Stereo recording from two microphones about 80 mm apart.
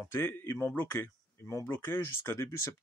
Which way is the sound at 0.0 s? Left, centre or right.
Left.